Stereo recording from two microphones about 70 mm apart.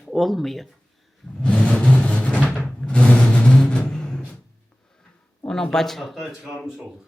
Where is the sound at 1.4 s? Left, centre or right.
Centre.